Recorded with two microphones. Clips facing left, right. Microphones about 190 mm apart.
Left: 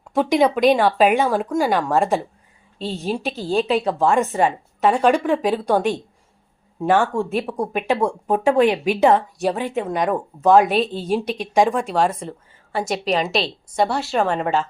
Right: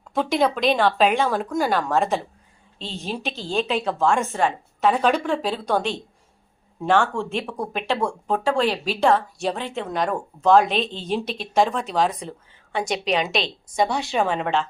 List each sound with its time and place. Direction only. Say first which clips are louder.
0.1 s a woman's voice: left 4 dB; 15° left (ahead or behind)
3.8 s a woman's voice: left 3 dB; 15° left (ahead or behind)